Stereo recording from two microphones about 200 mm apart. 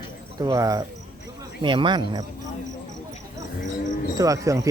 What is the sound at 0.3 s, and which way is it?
A man's voice, 20° right (ahead or behind).